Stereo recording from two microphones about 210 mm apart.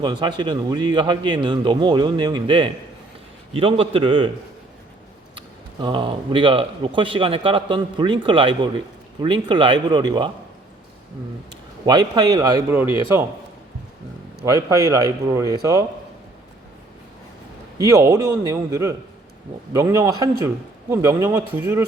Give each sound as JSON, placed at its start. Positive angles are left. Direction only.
{"t": 0.0, "sound": "a man's voice", "side_deg": -20}
{"t": 5.8, "sound": "a man's voice", "side_deg": -25}
{"t": 11.9, "sound": "speech", "side_deg": -20}
{"t": 14.4, "sound": "speech", "side_deg": -15}
{"t": 17.7, "sound": "speech", "side_deg": -15}